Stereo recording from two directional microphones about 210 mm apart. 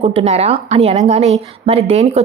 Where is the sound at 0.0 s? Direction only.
30° right (ahead or behind).